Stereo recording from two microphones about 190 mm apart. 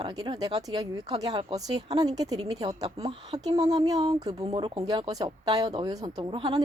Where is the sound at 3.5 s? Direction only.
20° right (ahead or behind).